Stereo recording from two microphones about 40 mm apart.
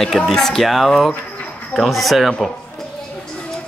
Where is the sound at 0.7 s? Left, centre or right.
Centre.